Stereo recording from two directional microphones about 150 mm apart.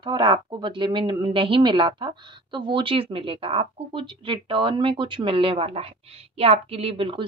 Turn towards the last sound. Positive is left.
turn(degrees=-35)  # may be behind; listen again after turning